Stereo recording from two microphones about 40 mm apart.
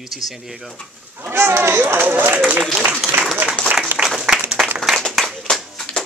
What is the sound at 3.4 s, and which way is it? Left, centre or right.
Applause, right.